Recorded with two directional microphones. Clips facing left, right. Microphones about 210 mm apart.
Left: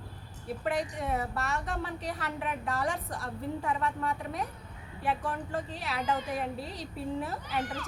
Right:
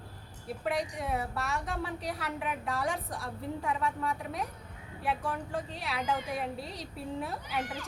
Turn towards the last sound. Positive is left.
turn(degrees=0)  # may be behind; listen again after turning